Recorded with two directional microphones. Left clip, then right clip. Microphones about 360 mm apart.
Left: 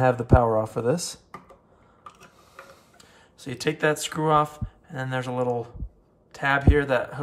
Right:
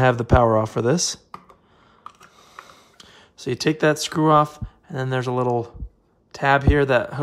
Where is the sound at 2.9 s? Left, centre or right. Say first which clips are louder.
Right 6 dB; right.